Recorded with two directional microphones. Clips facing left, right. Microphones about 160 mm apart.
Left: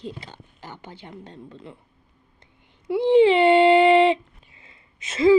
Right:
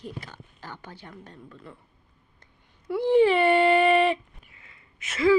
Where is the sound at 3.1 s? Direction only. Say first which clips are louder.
Left 4 dB; 20° left (ahead or behind).